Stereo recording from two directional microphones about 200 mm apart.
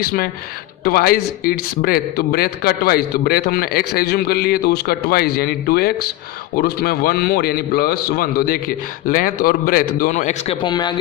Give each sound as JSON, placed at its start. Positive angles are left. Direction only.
{"t": 0.0, "sound": "speech", "side_deg": 45}